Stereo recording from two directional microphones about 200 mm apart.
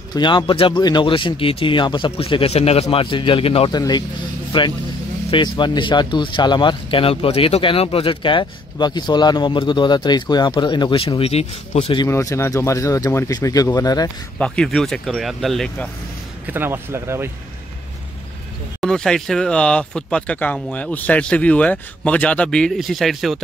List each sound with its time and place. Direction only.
0.1 s speech: 20° left (ahead or behind)
12.1 s speech: 15° left (ahead or behind)
14.4 s speech: 5° left (ahead or behind)
16.4 s speech: 10° right (ahead or behind)
18.8 s speech: 5° left (ahead or behind)